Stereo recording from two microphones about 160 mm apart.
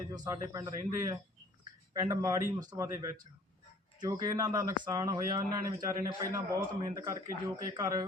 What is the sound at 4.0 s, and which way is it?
Speech, 25° right (ahead or behind).